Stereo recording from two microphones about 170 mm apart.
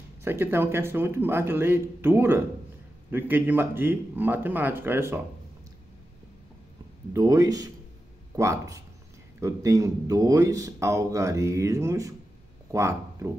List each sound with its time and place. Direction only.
0.2 s a man's voice: 15° right (ahead or behind)
7.2 s speech: 20° right (ahead or behind)